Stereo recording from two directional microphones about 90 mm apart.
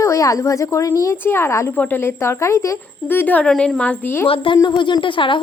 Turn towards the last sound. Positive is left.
turn(degrees=70)  # may be behind; listen again after turning